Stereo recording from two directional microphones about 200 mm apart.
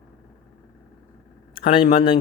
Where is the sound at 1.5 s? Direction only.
25° left (ahead or behind).